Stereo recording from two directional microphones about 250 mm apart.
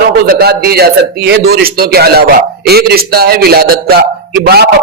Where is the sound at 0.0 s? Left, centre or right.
Right.